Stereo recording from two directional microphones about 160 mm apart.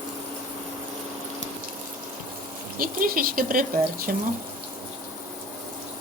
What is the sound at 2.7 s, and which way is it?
Speech, 60° right (ahead or behind).